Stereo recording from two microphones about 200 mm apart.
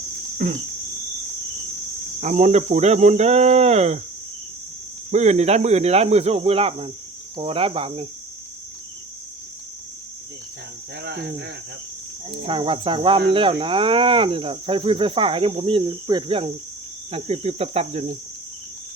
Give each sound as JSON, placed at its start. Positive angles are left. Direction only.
{"t": 2.2, "sound": "speech", "side_deg": -35}
{"t": 5.1, "sound": "speech", "side_deg": -35}
{"t": 11.0, "sound": "speech", "side_deg": -60}
{"t": 12.5, "sound": "speech", "side_deg": -25}